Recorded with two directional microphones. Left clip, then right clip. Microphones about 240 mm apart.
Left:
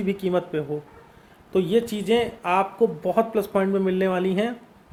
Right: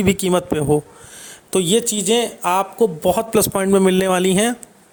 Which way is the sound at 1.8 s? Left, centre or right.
Right.